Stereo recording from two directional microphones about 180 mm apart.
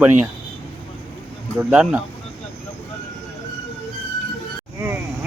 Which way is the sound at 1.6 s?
5° right (ahead or behind).